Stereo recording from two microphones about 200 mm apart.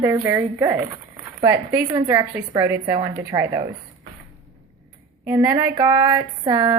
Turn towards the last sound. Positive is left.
turn(degrees=-20)  # may be behind; listen again after turning